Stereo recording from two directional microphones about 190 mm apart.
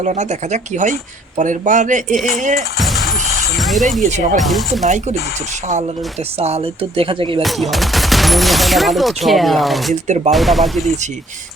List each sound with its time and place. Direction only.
0.0 s speech: 35° right (ahead or behind)
2.7 s a sound: centre (ahead or behind)
3.6 s speech: centre (ahead or behind)
4.0 s speech: 40° right (ahead or behind)
4.4 s speech: centre (ahead or behind)
6.4 s speech: 30° right (ahead or behind)
7.4 s speech: centre (ahead or behind)
9.9 s speech: 40° right (ahead or behind)
10.3 s speech: centre (ahead or behind)